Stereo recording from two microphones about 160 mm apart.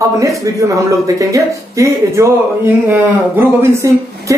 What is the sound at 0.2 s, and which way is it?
A woman's voice, 20° right (ahead or behind).